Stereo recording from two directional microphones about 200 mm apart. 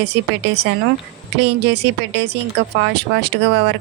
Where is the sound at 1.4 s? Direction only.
60° right (ahead or behind).